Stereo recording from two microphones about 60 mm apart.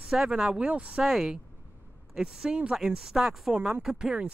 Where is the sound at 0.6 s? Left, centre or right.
Right.